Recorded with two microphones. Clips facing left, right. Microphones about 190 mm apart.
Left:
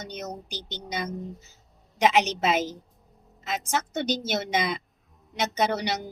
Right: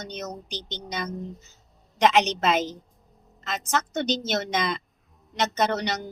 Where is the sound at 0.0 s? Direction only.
10° left (ahead or behind).